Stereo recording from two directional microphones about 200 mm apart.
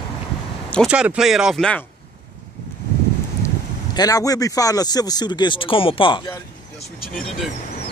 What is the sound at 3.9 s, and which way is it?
Speech, 20° left (ahead or behind).